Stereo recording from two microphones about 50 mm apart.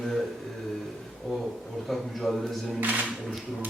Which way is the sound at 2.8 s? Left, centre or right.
Right.